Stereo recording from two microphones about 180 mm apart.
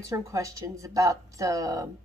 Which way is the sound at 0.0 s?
20° right (ahead or behind).